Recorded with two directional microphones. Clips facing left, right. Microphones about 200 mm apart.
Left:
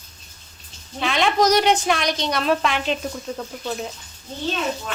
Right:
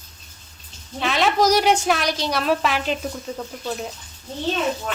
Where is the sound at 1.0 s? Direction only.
Centre (ahead or behind).